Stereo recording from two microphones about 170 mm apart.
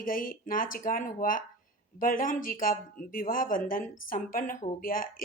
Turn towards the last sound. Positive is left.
turn(degrees=55)  # may be behind; listen again after turning